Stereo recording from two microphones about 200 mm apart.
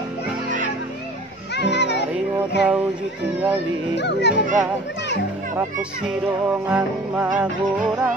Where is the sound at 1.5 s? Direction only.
60° left (ahead or behind).